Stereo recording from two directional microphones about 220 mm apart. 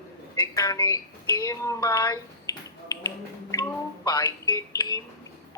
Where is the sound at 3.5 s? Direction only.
15° left (ahead or behind).